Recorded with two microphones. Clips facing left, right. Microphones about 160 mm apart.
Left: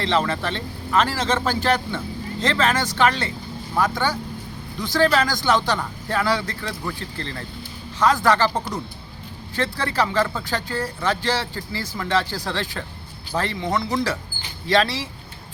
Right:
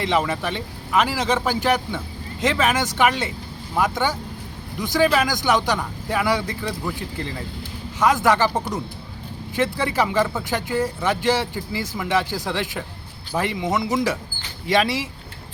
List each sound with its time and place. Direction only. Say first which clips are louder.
0.0 s speech: even; 15° right (ahead or behind)
9.6 s speech: right 2 dB; 20° right (ahead or behind)